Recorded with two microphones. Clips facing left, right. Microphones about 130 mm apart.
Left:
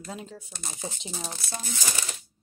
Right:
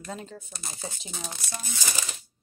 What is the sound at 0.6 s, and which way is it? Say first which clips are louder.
Speech: left 3 dB; 25° left (ahead or behind).